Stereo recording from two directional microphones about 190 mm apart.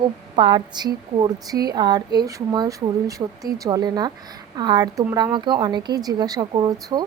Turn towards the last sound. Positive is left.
turn(degrees=-20)  # may be behind; listen again after turning